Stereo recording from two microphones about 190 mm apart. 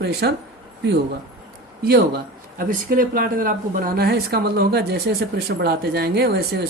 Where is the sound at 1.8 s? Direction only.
55° right (ahead or behind).